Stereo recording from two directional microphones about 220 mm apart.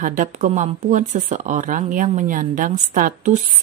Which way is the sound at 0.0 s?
35° right (ahead or behind).